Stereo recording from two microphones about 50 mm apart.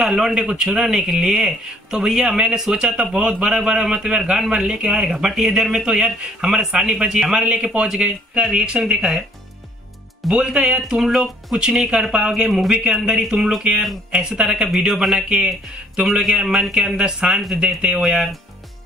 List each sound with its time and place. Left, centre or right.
0.0 s speech: centre
10.3 s speech: centre
16.7 s speech: centre